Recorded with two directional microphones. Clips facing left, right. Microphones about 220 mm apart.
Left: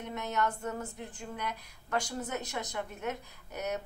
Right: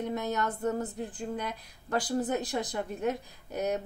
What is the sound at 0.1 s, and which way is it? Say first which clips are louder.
A woman's voice: right 2 dB; 35° right (ahead or behind).